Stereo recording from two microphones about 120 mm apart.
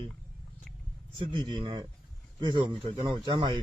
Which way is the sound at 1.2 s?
45° right (ahead or behind).